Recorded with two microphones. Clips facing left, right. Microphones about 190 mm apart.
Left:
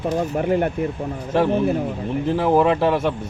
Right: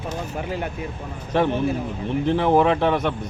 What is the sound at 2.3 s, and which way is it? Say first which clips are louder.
Speech: left 1 dB; 5° left (ahead or behind).